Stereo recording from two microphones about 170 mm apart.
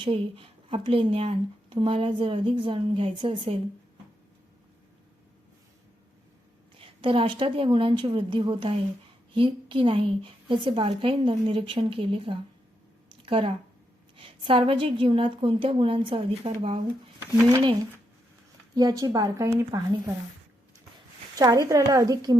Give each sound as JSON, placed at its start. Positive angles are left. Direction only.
{"t": 0.0, "sound": "speech", "side_deg": -30}
{"t": 6.7, "sound": "speech", "side_deg": -30}
{"t": 13.1, "sound": "a sound", "side_deg": -30}
{"t": 14.2, "sound": "speech", "side_deg": -30}
{"t": 21.3, "sound": "speech", "side_deg": -20}